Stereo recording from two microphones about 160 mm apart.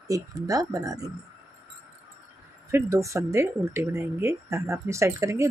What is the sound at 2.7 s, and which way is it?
Speech, 20° right (ahead or behind).